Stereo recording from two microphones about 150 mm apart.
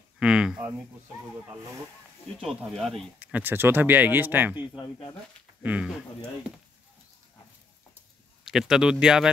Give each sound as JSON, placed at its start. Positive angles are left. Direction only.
{"t": 0.2, "sound": "speech", "side_deg": -5}
{"t": 2.4, "sound": "speech", "side_deg": 0}
{"t": 4.6, "sound": "speech", "side_deg": 30}
{"t": 5.6, "sound": "speech", "side_deg": -10}
{"t": 8.5, "sound": "speech", "side_deg": 0}